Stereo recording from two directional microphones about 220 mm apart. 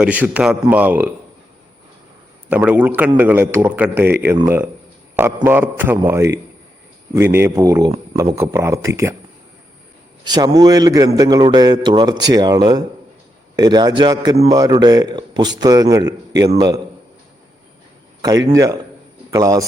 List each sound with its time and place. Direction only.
0.0 s a man's voice: 5° right (ahead or behind)
2.5 s a man's voice: 10° right (ahead or behind)
10.2 s a man's voice: 20° right (ahead or behind)
18.2 s a man's voice: 15° right (ahead or behind)